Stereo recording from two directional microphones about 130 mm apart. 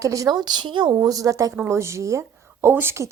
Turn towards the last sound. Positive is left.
turn(degrees=-20)  # may be behind; listen again after turning